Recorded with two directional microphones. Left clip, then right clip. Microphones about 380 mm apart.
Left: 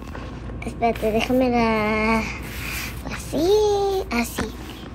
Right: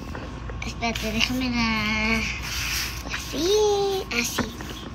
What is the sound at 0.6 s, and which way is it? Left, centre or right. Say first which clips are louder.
A woman's voice: left 6 dB; centre.